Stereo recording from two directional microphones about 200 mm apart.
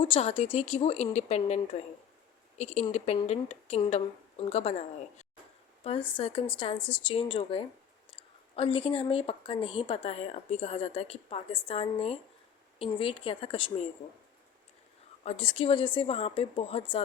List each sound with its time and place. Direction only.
0.0 s a woman's voice: 30° left (ahead or behind)
15.2 s a woman's voice: 30° left (ahead or behind)